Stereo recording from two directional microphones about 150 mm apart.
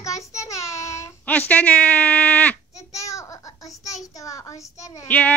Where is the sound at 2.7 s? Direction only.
20° left (ahead or behind).